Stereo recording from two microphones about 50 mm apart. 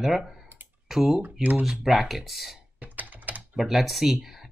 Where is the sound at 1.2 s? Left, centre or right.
Right.